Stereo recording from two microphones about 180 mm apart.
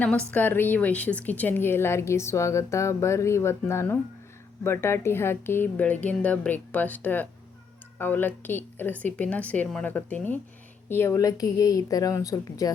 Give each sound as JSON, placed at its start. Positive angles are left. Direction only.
{"t": 0.3, "sound": "a woman's voice", "side_deg": 10}